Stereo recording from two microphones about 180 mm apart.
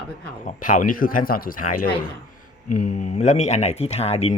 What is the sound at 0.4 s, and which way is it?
Speech, 50° left (ahead or behind).